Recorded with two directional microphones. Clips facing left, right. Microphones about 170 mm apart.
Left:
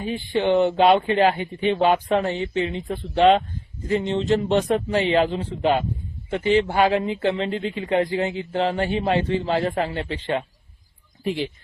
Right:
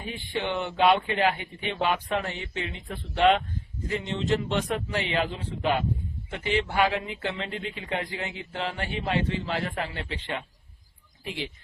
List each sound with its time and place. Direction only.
0.0 s speech: 30° left (ahead or behind)